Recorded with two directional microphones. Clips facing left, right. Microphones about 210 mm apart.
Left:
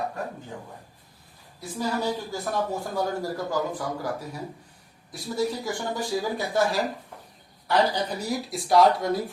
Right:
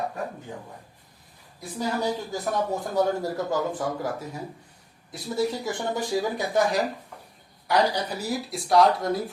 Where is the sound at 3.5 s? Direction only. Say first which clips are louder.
Right 1 dB; 25° right (ahead or behind).